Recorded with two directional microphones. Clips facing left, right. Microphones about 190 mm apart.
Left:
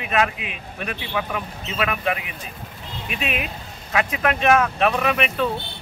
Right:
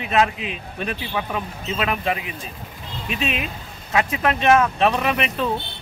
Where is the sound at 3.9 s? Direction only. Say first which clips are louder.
Right 1 dB; 30° right (ahead or behind).